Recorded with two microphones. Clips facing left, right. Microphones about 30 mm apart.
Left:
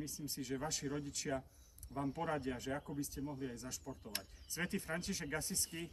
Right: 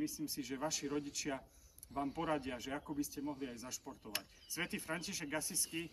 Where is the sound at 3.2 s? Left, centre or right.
Right.